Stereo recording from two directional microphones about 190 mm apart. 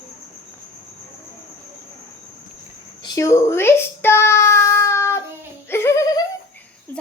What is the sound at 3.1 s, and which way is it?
Child singing, 15° left (ahead or behind).